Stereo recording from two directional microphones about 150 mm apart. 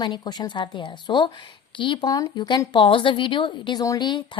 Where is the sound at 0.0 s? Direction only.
30° left (ahead or behind).